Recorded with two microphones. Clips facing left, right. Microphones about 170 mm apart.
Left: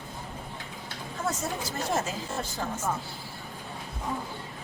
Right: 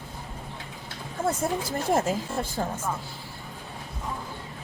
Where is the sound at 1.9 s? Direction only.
55° right (ahead or behind).